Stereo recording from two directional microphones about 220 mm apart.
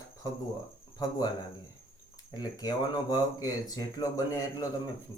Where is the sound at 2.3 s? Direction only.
15° left (ahead or behind).